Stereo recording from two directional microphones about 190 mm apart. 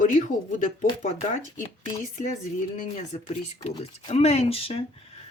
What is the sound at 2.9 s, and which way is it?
Speech, 35° left (ahead or behind).